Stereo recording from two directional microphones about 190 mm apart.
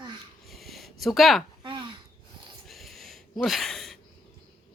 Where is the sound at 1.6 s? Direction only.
25° right (ahead or behind).